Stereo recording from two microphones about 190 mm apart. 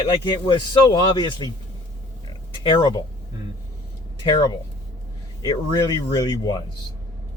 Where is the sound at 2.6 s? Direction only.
25° left (ahead or behind).